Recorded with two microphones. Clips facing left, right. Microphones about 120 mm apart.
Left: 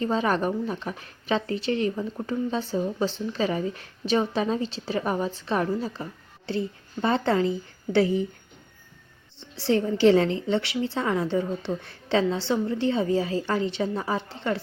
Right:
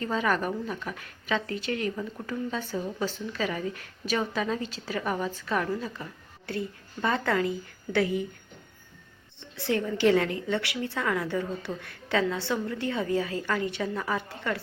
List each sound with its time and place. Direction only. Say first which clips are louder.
0.0 s a woman's voice: left 3 dB; 30° left (ahead or behind)
9.4 s a woman's voice: left 4 dB; 30° left (ahead or behind)